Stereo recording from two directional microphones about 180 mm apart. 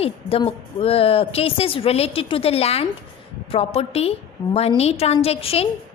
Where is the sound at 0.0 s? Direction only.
35° left (ahead or behind).